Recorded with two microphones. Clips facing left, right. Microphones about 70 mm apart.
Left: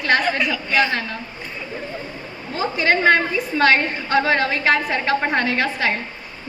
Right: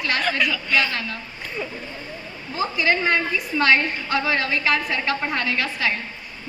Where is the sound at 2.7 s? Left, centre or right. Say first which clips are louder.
Left 5 dB; left.